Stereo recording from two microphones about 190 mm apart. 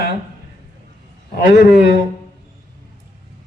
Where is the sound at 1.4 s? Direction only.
45° left (ahead or behind).